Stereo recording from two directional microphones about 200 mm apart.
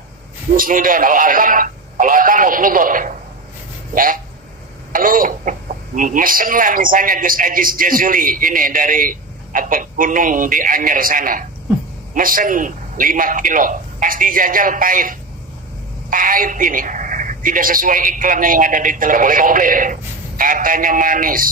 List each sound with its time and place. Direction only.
0.6 s speech: 45° right (ahead or behind)